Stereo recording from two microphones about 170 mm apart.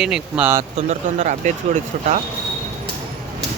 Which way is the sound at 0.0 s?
5° right (ahead or behind).